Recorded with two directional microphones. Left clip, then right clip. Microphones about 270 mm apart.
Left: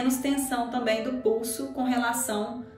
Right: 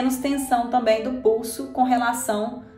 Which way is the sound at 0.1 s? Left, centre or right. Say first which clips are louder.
Right 6 dB; right.